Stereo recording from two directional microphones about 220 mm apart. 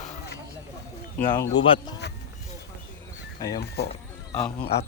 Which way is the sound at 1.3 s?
20° left (ahead or behind).